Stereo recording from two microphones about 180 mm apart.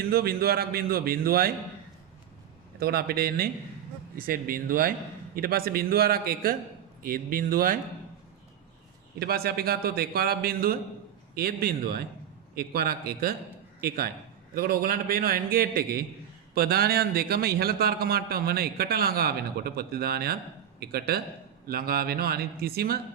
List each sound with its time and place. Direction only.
0.1 s a man's voice: 55° right (ahead or behind)
2.7 s a man's voice: 60° right (ahead or behind)
9.1 s a man's voice: 60° right (ahead or behind)